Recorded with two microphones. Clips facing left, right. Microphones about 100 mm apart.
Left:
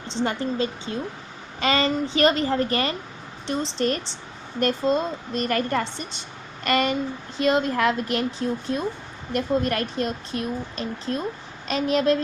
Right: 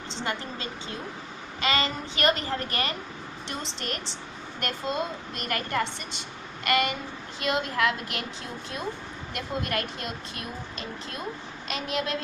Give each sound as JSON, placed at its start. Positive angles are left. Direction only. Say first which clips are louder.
{"t": 0.2, "sound": "speech", "louder": "left 9 dB", "side_deg": 30}